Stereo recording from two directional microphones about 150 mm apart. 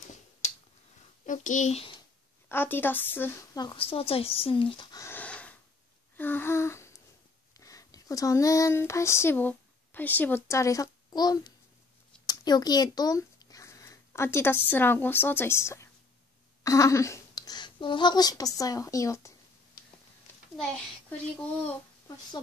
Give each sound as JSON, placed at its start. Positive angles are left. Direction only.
{"t": 0.4, "sound": "a sound", "side_deg": 45}
{"t": 1.2, "sound": "a child's voice", "side_deg": 60}
{"t": 2.5, "sound": "a woman's voice", "side_deg": 15}
{"t": 3.5, "sound": "speech", "side_deg": 30}
{"t": 4.9, "sound": "a sound", "side_deg": 15}
{"t": 7.5, "sound": "a woman's voice", "side_deg": 20}